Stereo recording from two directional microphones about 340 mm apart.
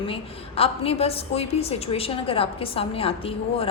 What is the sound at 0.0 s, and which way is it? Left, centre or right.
A woman's voice, centre.